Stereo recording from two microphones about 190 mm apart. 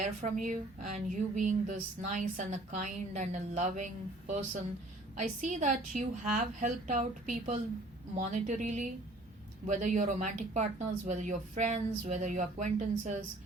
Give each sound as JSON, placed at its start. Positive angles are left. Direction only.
{"t": 0.0, "sound": "speech", "side_deg": -40}